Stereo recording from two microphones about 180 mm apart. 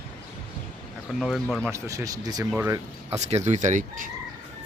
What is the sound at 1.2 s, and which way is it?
Speech, centre (ahead or behind).